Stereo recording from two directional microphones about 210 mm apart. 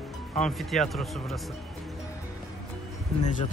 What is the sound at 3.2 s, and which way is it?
Speech, 35° left (ahead or behind).